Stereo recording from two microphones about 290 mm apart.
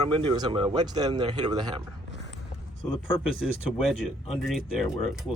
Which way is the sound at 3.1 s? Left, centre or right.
Centre.